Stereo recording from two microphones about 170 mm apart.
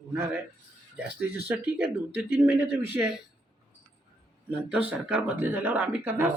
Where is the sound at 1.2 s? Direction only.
10° right (ahead or behind).